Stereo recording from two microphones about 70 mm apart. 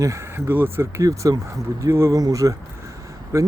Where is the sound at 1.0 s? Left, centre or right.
Right.